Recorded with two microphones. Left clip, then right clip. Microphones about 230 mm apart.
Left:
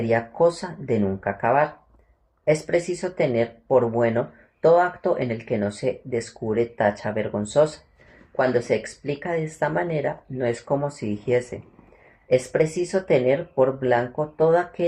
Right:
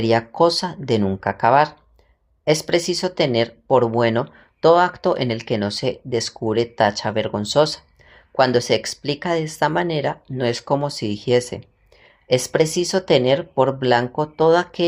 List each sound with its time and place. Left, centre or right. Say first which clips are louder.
0.4 s speech: right 3 dB; right
2.7 s speech: right 4 dB; right